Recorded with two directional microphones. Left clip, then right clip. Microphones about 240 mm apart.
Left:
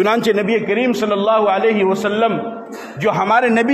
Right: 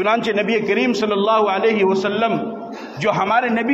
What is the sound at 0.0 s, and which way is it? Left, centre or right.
A man's voice, left.